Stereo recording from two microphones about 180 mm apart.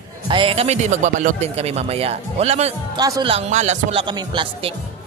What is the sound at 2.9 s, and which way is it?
Speech, 20° right (ahead or behind).